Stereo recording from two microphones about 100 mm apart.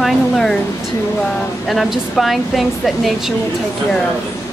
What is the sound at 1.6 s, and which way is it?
Speech, centre (ahead or behind).